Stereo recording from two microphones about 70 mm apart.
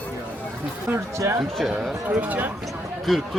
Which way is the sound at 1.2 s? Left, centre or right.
Right.